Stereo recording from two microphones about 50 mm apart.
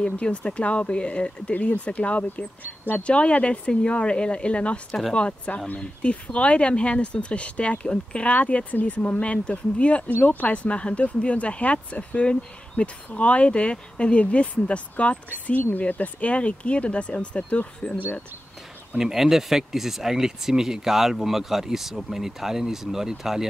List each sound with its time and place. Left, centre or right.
0.0 s speech: left
18.9 s speech: centre